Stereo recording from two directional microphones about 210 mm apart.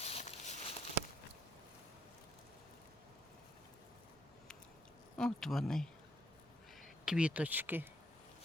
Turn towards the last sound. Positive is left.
turn(degrees=-10)  # may be behind; listen again after turning